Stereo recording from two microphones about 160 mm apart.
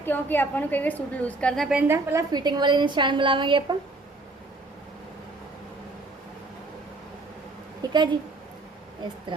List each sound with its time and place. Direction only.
0.0 s a woman's voice: 10° left (ahead or behind)
1.9 s a woman's voice: 20° right (ahead or behind)
7.8 s a sound: 30° right (ahead or behind)